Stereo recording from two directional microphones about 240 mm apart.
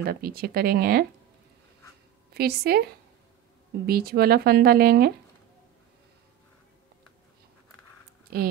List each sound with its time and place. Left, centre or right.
0.0 s speech: right
2.3 s speech: right
3.8 s speech: right